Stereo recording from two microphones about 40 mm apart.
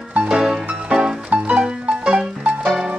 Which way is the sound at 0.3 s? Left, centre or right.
Centre.